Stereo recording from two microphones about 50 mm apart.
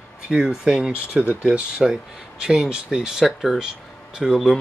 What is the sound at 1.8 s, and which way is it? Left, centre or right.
Speech, centre.